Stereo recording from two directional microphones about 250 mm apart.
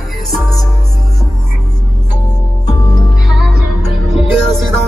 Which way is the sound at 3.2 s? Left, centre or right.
Centre.